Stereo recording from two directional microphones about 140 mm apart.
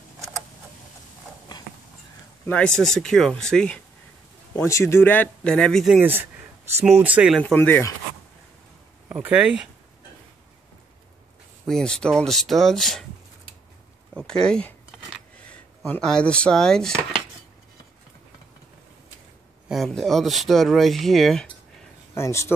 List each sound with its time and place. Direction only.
2.4 s speech: 10° left (ahead or behind)
4.6 s speech: 20° left (ahead or behind); by 7.3 s 10° right (ahead or behind)
7.3 s speech: 10° left (ahead or behind)
9.1 s speech: 10° right (ahead or behind)
11.6 s speech: 5° left (ahead or behind)
14.1 s speech: 5° left (ahead or behind)
19.7 s speech: centre (ahead or behind)
22.1 s speech: 20° left (ahead or behind)